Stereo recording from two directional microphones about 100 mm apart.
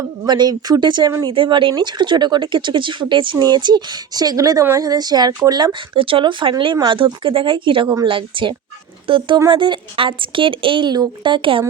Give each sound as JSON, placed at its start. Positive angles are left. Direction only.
{"t": 0.3, "sound": "speech", "side_deg": -45}
{"t": 5.9, "sound": "a woman's voice", "side_deg": -60}